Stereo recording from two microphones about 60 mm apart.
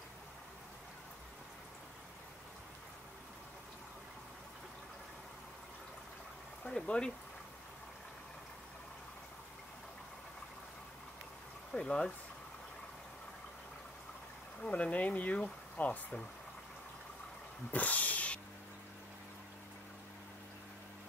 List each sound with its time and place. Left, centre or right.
6.6 s speech: centre
11.7 s speech: centre
14.6 s speech: left
17.6 s cat: left